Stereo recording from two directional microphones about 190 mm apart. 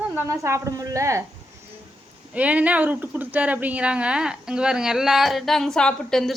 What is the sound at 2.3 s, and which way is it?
Speech, 5° right (ahead or behind).